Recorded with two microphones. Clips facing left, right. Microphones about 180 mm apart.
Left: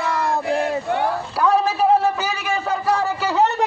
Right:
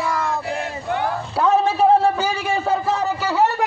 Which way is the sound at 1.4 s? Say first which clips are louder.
Right 2 dB; 25° right (ahead or behind).